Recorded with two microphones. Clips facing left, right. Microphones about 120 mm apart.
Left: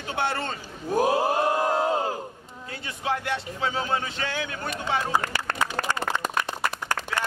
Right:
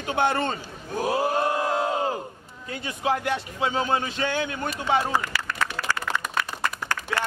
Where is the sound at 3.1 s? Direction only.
20° right (ahead or behind).